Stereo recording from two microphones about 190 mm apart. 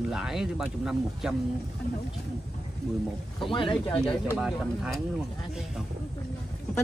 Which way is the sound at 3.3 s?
25° left (ahead or behind).